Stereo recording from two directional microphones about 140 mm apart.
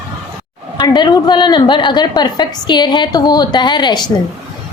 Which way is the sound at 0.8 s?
30° left (ahead or behind).